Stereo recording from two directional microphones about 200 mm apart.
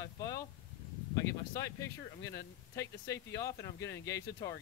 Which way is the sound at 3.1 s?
15° left (ahead or behind).